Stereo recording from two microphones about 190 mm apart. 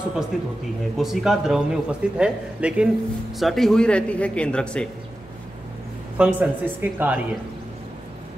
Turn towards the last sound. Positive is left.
turn(degrees=-10)  # may be behind; listen again after turning